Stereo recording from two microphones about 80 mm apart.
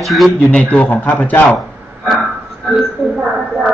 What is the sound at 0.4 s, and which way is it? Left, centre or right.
A man's voice, centre.